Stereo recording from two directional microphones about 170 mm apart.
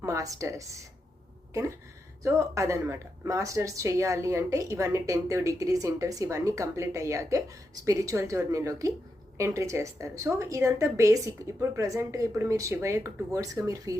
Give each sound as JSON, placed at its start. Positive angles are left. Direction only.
{"t": 0.0, "sound": "a woman's voice", "side_deg": -20}
{"t": 2.2, "sound": "a woman's voice", "side_deg": -15}